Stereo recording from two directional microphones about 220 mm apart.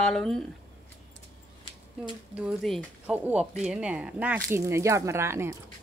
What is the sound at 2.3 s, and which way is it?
Speech, centre (ahead or behind).